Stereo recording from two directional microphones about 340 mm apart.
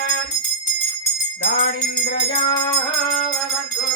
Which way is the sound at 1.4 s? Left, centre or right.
Left.